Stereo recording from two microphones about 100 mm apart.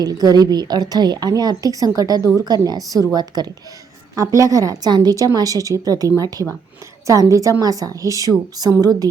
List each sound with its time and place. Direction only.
0.0 s a woman's voice: 40° right (ahead or behind)